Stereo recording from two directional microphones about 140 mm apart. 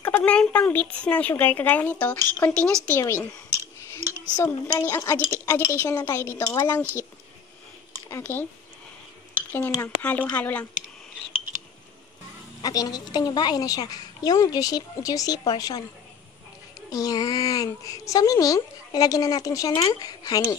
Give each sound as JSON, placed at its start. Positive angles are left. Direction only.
{"t": 0.0, "sound": "speech", "side_deg": 10}
{"t": 3.0, "sound": "a woman's voice", "side_deg": 20}
{"t": 4.7, "sound": "a woman's voice", "side_deg": 20}
{"t": 8.1, "sound": "speech", "side_deg": 15}
{"t": 9.5, "sound": "speech", "side_deg": 15}
{"t": 12.6, "sound": "a woman's voice", "side_deg": 25}
{"t": 16.9, "sound": "a woman's voice", "side_deg": 25}